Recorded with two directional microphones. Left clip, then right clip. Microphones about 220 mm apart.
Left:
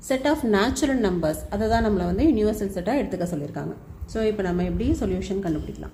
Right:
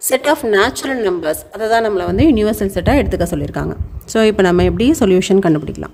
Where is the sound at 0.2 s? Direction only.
40° right (ahead or behind).